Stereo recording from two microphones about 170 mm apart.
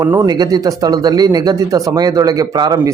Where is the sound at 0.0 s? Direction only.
15° right (ahead or behind).